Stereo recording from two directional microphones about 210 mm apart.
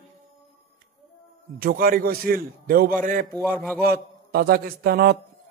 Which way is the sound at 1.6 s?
45° right (ahead or behind).